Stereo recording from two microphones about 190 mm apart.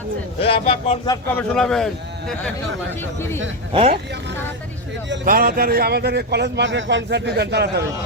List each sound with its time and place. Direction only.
0.4 s speech: 30° left (ahead or behind)
1.4 s a man's voice: 5° left (ahead or behind)
3.7 s speech: 30° right (ahead or behind)
5.2 s a man's voice: 50° right (ahead or behind)